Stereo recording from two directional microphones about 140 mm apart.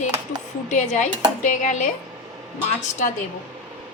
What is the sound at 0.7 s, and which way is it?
Speech, 60° left (ahead or behind).